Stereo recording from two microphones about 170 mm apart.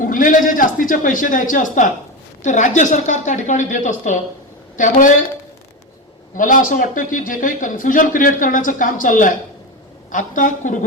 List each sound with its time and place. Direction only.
0.0 s a man's voice: 55° left (ahead or behind)
6.3 s a man's voice: 50° left (ahead or behind)